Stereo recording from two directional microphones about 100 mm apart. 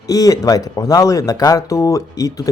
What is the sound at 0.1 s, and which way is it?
Speech, 35° left (ahead or behind).